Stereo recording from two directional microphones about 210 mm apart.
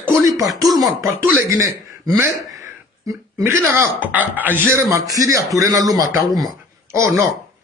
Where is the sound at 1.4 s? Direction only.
15° right (ahead or behind).